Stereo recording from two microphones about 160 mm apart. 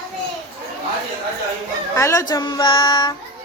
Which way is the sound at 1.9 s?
20° left (ahead or behind).